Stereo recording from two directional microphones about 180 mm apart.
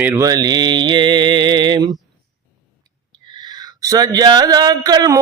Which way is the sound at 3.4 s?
20° right (ahead or behind).